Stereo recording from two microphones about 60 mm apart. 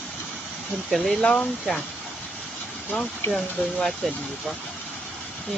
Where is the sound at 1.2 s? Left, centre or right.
Centre.